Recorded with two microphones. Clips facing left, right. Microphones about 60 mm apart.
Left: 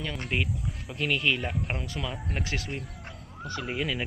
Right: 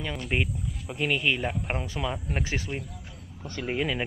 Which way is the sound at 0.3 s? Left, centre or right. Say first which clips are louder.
Right 2 dB; centre.